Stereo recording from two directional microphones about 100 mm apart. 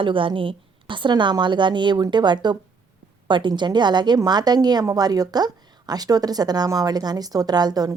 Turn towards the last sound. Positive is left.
turn(degrees=-40)  # may be behind; listen again after turning